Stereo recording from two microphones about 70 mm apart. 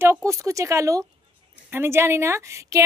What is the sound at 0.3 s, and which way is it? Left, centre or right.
Speech, right.